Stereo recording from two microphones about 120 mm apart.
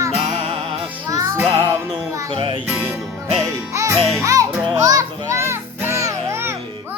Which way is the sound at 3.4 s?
25° right (ahead or behind).